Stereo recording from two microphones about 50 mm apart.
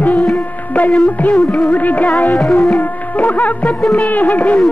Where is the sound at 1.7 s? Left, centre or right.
Left.